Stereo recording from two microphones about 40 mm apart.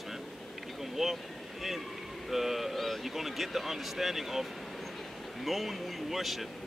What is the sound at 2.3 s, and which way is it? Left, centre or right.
Speech, centre.